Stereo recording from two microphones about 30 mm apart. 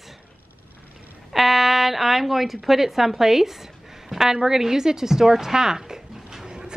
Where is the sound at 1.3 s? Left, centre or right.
Centre.